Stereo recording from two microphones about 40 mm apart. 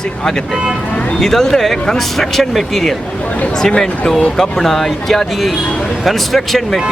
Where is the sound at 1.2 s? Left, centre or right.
Centre.